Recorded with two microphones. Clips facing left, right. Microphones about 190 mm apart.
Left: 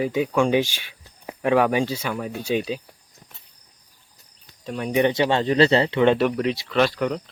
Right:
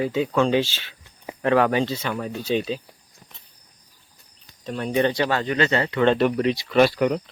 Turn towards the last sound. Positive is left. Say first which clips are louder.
# right 3 dB
turn(degrees=-10)  # may be behind; listen again after turning